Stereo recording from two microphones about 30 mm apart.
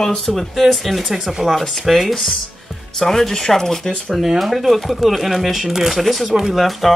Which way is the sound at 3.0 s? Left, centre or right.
Centre.